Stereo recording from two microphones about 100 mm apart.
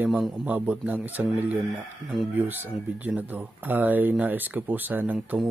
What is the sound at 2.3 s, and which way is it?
Speech, 20° right (ahead or behind).